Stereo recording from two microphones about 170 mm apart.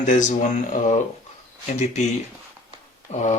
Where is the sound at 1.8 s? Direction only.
40° left (ahead or behind).